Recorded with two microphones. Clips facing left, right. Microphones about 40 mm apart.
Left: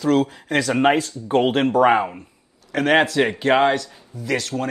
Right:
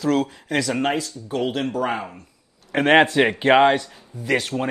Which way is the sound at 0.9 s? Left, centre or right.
Left.